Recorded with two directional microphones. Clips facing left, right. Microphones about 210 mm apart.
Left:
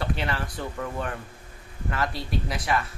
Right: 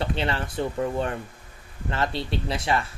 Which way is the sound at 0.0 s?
25° right (ahead or behind).